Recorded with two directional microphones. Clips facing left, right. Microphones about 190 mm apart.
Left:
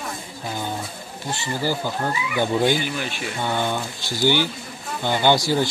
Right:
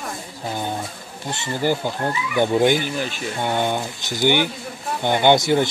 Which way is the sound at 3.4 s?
20° right (ahead or behind).